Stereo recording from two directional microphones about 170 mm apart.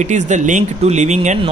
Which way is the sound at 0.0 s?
45° right (ahead or behind).